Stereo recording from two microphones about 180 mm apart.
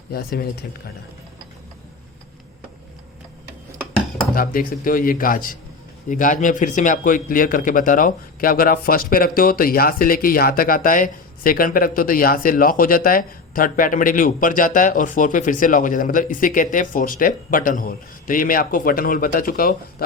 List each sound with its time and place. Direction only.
0.1 s speech: 55° left (ahead or behind)
4.2 s speech: 50° left (ahead or behind)